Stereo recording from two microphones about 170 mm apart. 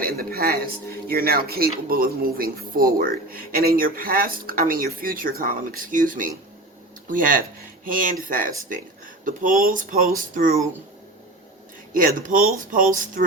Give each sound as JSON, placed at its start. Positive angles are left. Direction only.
{"t": 0.0, "sound": "speech", "side_deg": -60}
{"t": 11.9, "sound": "speech", "side_deg": -55}